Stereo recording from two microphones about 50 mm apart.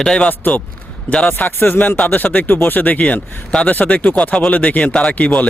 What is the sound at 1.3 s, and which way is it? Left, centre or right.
A man's voice, left.